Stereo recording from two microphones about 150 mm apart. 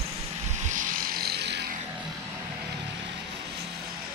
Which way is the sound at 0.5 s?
55° right (ahead or behind).